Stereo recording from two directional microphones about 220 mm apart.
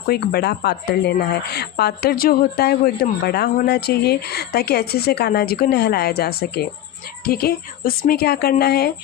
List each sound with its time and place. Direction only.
0.1 s a woman's voice: 45° left (ahead or behind)